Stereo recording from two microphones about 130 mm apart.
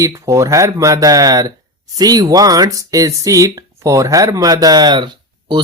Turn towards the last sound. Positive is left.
turn(degrees=-35)  # may be behind; listen again after turning